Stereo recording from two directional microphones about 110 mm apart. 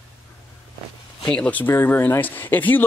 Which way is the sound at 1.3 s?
10° left (ahead or behind).